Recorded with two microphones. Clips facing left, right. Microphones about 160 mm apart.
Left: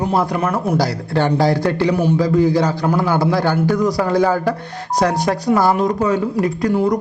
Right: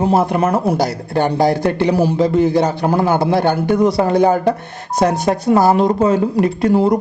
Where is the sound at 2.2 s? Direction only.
25° right (ahead or behind).